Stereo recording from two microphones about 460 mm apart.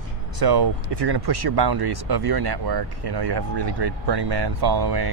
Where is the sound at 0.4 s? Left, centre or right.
Right.